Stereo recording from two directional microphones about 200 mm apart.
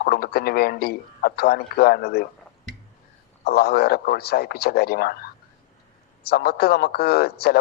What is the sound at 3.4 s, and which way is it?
A man's voice, 50° left (ahead or behind).